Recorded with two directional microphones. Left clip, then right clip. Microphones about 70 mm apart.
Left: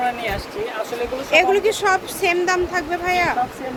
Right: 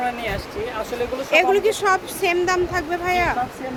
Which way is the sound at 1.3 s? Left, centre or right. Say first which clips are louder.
Left 1 dB; right.